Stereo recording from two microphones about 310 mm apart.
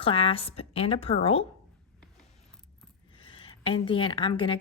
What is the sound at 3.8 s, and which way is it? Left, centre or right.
Speech, centre.